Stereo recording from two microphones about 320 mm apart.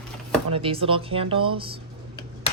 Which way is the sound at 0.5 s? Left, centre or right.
Centre.